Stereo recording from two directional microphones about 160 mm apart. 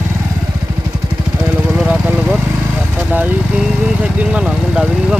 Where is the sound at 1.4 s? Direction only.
10° right (ahead or behind).